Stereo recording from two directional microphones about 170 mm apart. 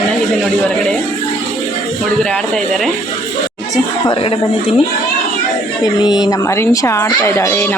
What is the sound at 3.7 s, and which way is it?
Speech, 30° left (ahead or behind).